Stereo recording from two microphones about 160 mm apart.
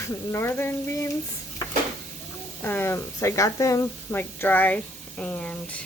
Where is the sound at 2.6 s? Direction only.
15° left (ahead or behind).